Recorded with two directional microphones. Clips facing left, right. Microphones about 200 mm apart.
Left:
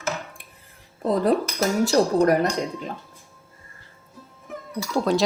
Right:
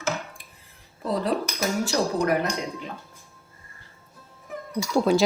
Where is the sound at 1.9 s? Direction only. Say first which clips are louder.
Left 6 dB; 40° left (ahead or behind).